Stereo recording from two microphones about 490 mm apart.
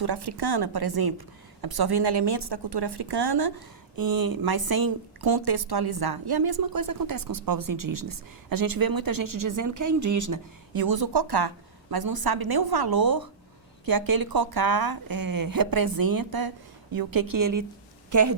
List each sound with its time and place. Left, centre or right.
0.0 s a woman's voice: right